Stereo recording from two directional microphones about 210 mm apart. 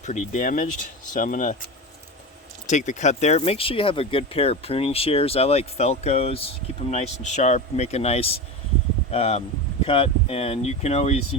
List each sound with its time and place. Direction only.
0.0 s speech: 35° left (ahead or behind)
2.6 s speech: 35° left (ahead or behind)